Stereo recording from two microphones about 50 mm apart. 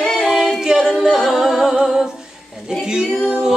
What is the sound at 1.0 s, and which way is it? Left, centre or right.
Music, centre.